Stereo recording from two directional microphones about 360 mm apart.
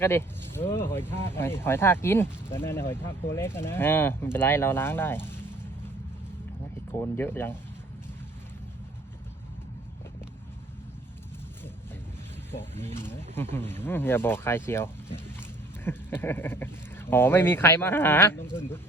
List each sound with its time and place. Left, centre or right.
0.0 s speech: centre
6.9 s speech: centre
12.8 s speech: centre